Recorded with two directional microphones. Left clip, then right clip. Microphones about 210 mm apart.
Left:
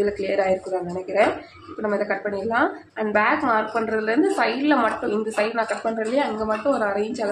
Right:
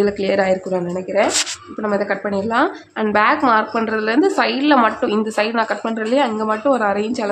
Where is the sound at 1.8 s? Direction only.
35° right (ahead or behind).